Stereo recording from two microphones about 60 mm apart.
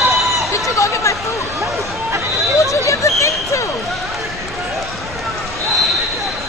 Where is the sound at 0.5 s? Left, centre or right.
Left.